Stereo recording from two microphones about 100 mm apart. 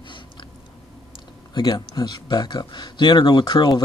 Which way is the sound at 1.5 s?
50° left (ahead or behind).